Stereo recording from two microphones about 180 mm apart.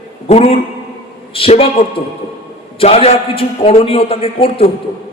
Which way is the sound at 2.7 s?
35° left (ahead or behind).